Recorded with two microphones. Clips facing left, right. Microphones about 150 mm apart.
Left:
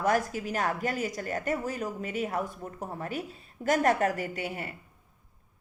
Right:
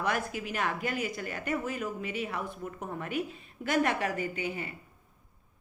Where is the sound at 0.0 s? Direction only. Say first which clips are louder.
Left 5 dB; 40° left (ahead or behind).